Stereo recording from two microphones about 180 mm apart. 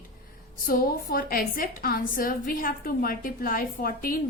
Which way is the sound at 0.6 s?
55° left (ahead or behind).